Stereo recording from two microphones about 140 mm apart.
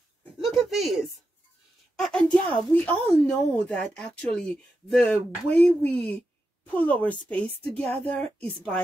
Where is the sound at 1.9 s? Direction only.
5° left (ahead or behind).